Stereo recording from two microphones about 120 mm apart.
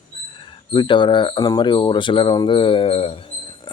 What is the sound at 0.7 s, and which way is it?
Speech, 40° left (ahead or behind).